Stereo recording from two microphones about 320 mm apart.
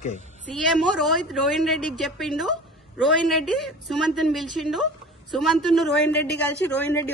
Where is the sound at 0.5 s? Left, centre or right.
Centre.